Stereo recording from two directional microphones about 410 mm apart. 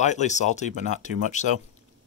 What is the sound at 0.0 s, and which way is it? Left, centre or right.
Speech, centre.